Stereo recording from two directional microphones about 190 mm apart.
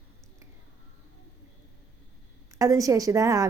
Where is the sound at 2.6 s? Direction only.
15° right (ahead or behind).